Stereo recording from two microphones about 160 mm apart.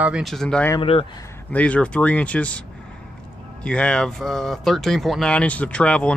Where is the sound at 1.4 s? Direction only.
10° left (ahead or behind).